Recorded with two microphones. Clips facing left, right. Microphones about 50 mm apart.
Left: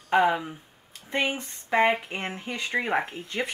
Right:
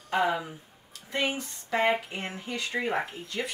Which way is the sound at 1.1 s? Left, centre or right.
Left.